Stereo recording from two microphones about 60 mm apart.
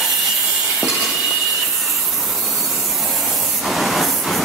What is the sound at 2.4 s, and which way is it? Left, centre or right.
Spray, centre.